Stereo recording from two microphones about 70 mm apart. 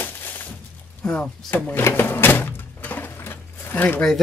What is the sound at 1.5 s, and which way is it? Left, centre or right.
Speech, left.